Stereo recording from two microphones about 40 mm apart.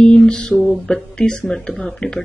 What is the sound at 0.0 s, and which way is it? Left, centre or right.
Mantra, left.